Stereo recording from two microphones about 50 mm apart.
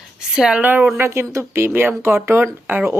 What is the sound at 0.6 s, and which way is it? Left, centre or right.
Speech, right.